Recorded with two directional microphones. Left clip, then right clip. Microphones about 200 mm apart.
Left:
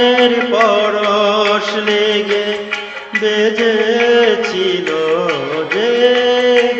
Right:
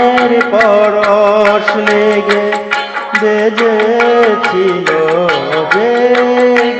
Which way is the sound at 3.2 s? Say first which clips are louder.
Right 2 dB; 15° right (ahead or behind).